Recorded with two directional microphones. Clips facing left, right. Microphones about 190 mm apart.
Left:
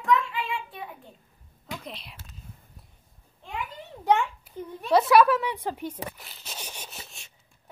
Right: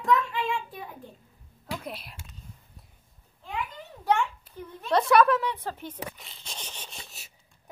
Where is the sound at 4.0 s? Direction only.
15° left (ahead or behind).